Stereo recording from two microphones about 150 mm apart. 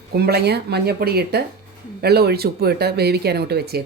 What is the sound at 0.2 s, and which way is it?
Speech, 90° right.